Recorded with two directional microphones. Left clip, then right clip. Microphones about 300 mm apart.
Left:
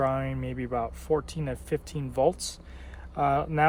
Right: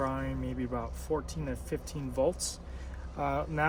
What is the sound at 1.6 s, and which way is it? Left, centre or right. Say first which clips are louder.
Speech: left 6 dB; left.